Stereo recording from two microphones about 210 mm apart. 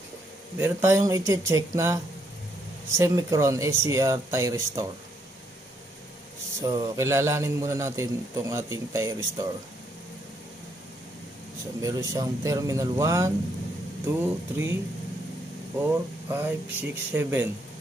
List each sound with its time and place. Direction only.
0.6 s a man's voice: 10° right (ahead or behind)
3.0 s a man's voice: 15° right (ahead or behind)
6.6 s a man's voice: 20° right (ahead or behind)
11.8 s a man's voice: 15° right (ahead or behind)
15.8 s a man's voice: 10° right (ahead or behind)